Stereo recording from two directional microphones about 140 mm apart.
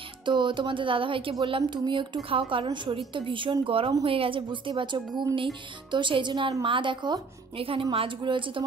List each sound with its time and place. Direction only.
0.2 s speech: 35° right (ahead or behind)